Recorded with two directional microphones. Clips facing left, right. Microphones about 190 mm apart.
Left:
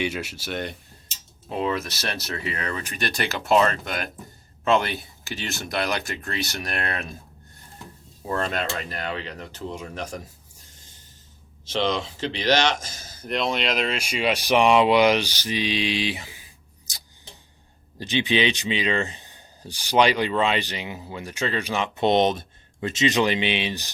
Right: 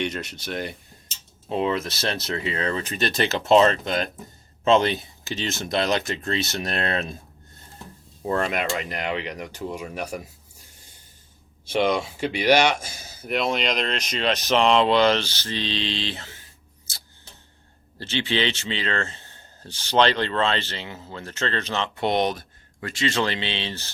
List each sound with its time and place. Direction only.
0.0 s speech: 5° left (ahead or behind)
1.5 s speech: 20° right (ahead or behind)
8.4 s speech: 15° right (ahead or behind)
11.6 s speech: 10° right (ahead or behind); by 17.0 s 15° left (ahead or behind)
18.0 s speech: 15° left (ahead or behind)